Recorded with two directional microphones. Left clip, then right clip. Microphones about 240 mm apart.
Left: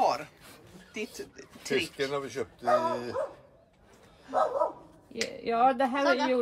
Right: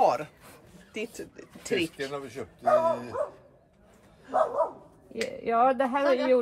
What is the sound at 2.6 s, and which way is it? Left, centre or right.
Speech, left.